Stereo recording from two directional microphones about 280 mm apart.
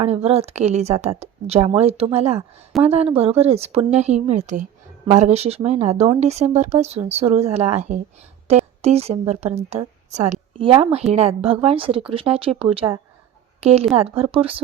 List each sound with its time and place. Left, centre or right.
0.0 s a woman's voice: right